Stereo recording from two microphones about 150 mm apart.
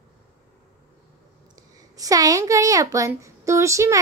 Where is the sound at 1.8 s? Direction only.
25° right (ahead or behind).